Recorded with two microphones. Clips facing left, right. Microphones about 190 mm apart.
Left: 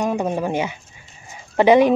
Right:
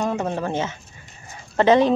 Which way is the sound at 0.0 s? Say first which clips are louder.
Left 3 dB; 15° left (ahead or behind).